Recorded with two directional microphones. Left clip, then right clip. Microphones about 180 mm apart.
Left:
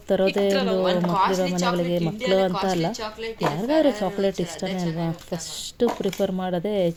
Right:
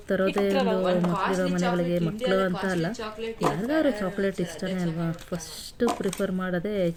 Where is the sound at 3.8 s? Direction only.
20° left (ahead or behind).